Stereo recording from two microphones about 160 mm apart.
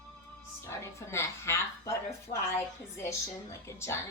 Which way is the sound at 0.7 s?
15° left (ahead or behind).